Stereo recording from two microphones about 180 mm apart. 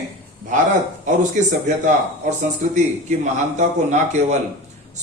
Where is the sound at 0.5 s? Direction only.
45° right (ahead or behind).